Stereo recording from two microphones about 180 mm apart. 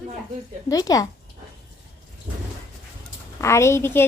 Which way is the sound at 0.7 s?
20° left (ahead or behind).